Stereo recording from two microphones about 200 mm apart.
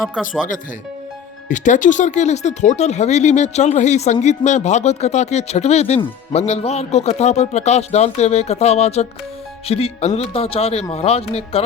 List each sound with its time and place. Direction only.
1.5 s speech: 40° left (ahead or behind)